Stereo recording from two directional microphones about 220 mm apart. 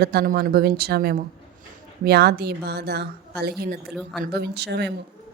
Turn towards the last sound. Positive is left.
turn(degrees=-50)  # may be behind; listen again after turning